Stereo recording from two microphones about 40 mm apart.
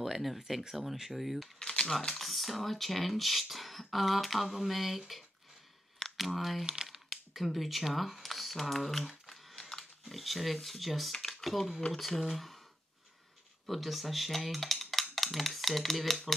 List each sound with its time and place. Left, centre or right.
0.0 s a sound: centre
0.5 s speech: centre
1.6 s typewriter: left
1.9 s speech: centre
6.6 s speech: centre
6.9 s a sound: centre
10.0 s speech: centre
13.7 s speech: centre